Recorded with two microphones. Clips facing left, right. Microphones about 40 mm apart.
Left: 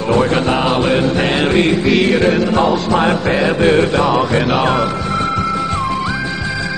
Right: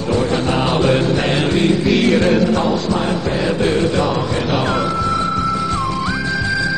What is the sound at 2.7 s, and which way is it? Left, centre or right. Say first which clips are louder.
Mantra: left 3 dB; centre.